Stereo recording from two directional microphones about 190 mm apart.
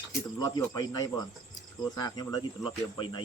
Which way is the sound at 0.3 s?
20° left (ahead or behind).